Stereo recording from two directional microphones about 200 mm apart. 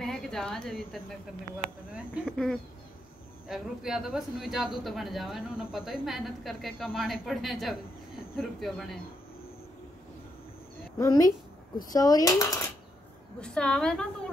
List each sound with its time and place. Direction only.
0.0 s a woman's voice: centre (ahead or behind)
11.0 s speech: 15° left (ahead or behind)
13.4 s speech: 5° left (ahead or behind)